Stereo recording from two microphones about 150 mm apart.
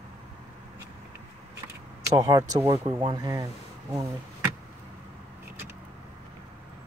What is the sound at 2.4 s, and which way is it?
Speech, 50° right (ahead or behind).